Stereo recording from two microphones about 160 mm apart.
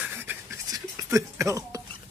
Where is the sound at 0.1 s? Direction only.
15° right (ahead or behind).